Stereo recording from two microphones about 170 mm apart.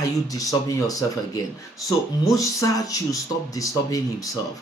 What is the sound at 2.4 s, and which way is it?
Speech, 20° left (ahead or behind).